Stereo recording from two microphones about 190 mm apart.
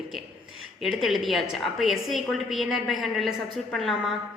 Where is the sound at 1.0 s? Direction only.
Centre (ahead or behind).